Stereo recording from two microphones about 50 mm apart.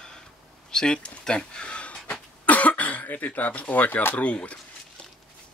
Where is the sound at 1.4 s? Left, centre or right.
Centre.